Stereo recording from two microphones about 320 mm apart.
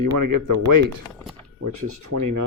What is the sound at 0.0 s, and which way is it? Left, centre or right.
Speech, right.